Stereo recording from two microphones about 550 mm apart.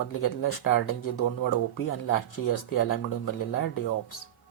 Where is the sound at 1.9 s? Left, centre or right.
Left.